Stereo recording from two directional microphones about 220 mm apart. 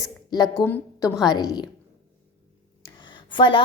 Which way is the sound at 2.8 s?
20° left (ahead or behind).